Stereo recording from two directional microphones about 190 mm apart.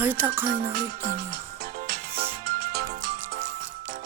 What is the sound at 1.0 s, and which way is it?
Music, 50° right (ahead or behind).